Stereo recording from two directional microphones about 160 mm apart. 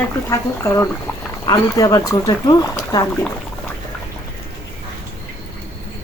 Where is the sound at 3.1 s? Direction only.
10° left (ahead or behind).